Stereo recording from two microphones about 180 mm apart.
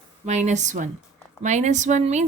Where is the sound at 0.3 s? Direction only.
40° right (ahead or behind).